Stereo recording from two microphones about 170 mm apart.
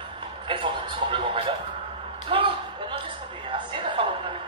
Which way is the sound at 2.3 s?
30° right (ahead or behind).